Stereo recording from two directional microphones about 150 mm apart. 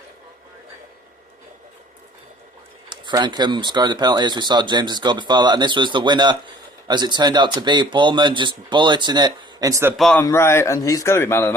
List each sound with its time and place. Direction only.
2.9 s speech: 30° right (ahead or behind)
10.0 s a man's voice: 5° left (ahead or behind)
10.2 s a man's voice: 15° left (ahead or behind)